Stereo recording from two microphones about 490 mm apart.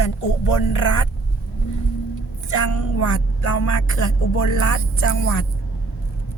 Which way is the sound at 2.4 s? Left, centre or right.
Left.